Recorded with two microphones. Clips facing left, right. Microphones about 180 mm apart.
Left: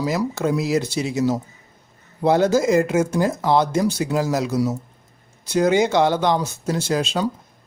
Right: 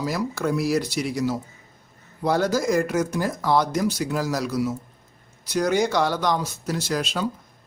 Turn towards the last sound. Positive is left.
turn(degrees=25)  # may be behind; listen again after turning